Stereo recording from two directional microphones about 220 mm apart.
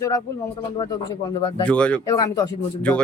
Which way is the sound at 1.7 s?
5° left (ahead or behind).